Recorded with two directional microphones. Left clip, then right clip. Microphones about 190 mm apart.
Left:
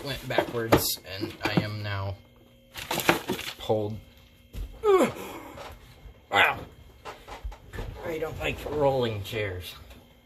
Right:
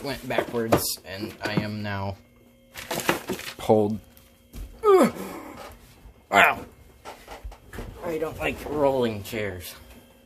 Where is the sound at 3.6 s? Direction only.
50° right (ahead or behind).